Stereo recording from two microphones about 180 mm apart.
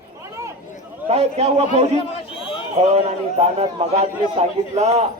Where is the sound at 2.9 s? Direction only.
35° right (ahead or behind).